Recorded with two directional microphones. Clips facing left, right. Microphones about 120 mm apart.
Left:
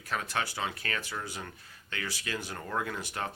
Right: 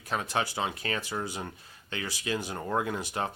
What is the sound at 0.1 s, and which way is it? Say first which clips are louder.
Speech: right 3 dB; 20° right (ahead or behind).